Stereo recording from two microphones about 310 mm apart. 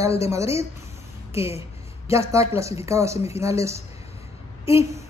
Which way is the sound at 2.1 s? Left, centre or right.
Centre.